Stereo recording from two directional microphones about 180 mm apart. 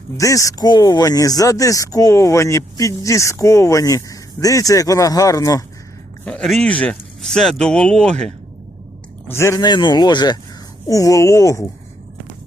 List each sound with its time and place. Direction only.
0.2 s speech: 20° left (ahead or behind)
6.2 s speech: 5° left (ahead or behind)
9.3 s speech: 15° left (ahead or behind)